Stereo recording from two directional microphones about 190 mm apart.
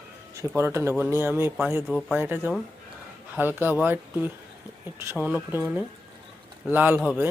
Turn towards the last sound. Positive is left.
turn(degrees=-10)  # may be behind; listen again after turning